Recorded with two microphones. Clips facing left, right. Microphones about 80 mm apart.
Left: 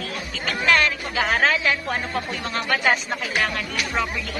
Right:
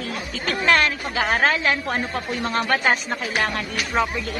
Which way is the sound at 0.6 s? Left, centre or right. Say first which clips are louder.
Right 1 dB; right.